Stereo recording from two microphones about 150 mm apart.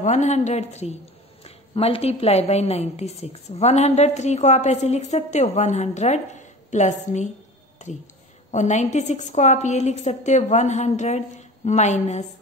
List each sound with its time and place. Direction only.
0.0 s a woman's voice: 50° left (ahead or behind)